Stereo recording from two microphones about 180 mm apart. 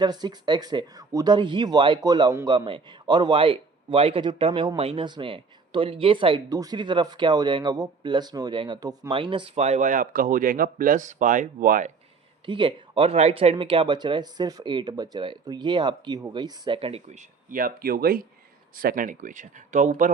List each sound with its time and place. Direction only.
0.0 s speech: 25° right (ahead or behind); by 11.9 s 45° right (ahead or behind)
12.5 s speech: 30° right (ahead or behind); by 20.1 s 45° right (ahead or behind)